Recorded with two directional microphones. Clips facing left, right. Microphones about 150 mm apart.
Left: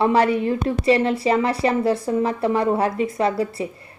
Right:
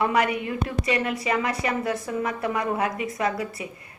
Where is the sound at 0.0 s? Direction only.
30° left (ahead or behind).